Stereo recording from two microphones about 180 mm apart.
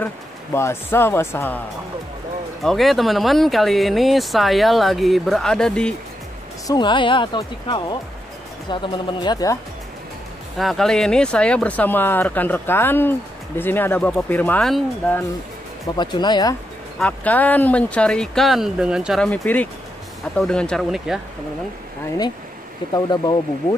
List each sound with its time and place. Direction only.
0.0 s speech: 15° left (ahead or behind)
2.6 s speech: centre (ahead or behind)
6.7 s speech: 25° left (ahead or behind)
10.6 s speech: centre (ahead or behind)
16.0 s speech: 25° left (ahead or behind)
17.0 s speech: 10° left (ahead or behind)
22.9 s speech: 25° left (ahead or behind)